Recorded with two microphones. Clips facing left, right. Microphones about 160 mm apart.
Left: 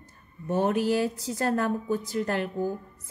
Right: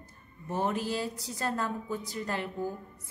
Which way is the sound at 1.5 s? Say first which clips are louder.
Left 6 dB; 65° left (ahead or behind).